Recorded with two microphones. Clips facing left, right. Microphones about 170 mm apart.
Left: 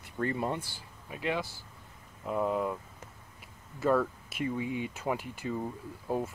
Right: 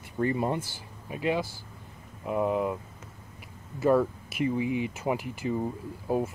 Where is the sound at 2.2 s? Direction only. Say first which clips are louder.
Right 3 dB; 10° right (ahead or behind).